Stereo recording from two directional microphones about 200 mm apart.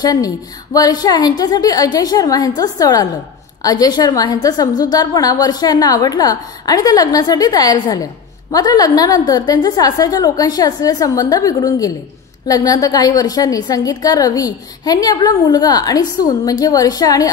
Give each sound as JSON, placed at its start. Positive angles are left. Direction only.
{"t": 0.0, "sound": "a woman's voice", "side_deg": 20}